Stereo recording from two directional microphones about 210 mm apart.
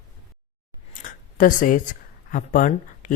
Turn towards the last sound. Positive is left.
turn(degrees=40)  # may be behind; listen again after turning